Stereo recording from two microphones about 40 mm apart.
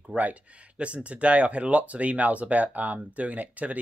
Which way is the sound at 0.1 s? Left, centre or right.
Right.